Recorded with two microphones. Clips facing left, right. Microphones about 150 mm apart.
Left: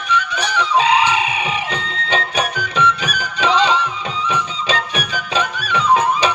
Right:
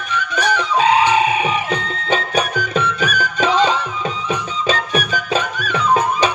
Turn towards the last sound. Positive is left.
turn(degrees=-45)  # may be behind; listen again after turning